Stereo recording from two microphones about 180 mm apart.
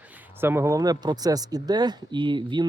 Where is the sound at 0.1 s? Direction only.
10° right (ahead or behind).